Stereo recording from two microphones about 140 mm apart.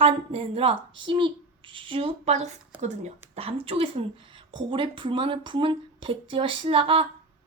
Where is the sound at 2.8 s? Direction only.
55° right (ahead or behind).